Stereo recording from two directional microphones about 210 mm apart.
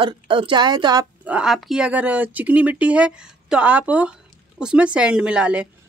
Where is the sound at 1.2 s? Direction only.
5° right (ahead or behind).